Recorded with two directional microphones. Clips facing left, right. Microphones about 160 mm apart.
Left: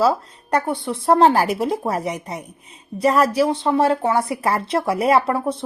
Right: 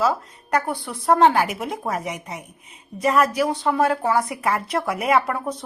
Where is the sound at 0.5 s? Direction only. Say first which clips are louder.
Left 3 dB; 25° left (ahead or behind).